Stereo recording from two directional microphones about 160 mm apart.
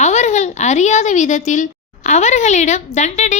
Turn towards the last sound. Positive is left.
turn(degrees=45)  # may be behind; listen again after turning